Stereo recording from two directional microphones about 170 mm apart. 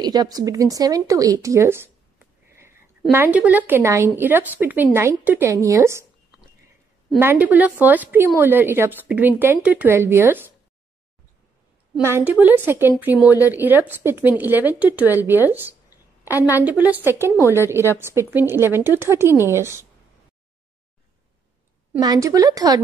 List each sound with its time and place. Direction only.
0.0 s a woman's voice: 25° right (ahead or behind)
7.2 s a woman's voice: 10° right (ahead or behind)
12.0 s a woman's voice: 15° right (ahead or behind)
16.3 s a woman's voice: 10° right (ahead or behind)
17.4 s a woman's voice: 15° left (ahead or behind)
17.6 s a woman's voice: 15° right (ahead or behind)
22.0 s speech: 20° right (ahead or behind)